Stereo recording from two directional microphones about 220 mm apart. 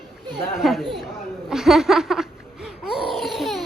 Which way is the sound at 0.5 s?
Centre (ahead or behind).